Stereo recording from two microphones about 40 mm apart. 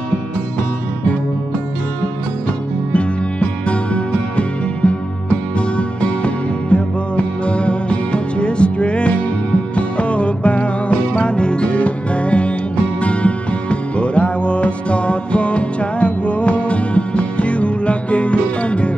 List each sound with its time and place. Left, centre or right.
2.9 s music: left